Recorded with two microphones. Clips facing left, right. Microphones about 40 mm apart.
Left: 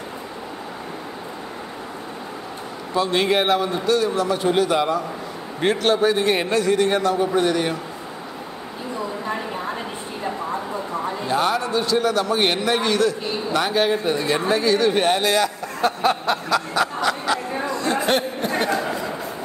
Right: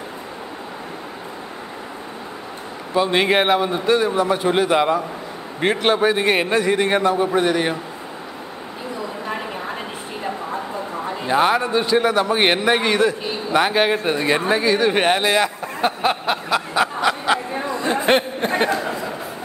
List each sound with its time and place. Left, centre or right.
2.9 s a man's voice: right
11.2 s a man's voice: right